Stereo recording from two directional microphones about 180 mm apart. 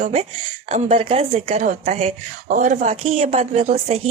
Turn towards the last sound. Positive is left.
turn(degrees=-35)  # may be behind; listen again after turning